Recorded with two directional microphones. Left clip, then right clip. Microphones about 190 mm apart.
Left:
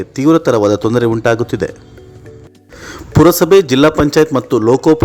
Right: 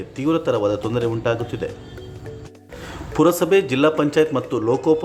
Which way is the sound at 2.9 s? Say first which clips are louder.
Left 8 dB; 30° left (ahead or behind).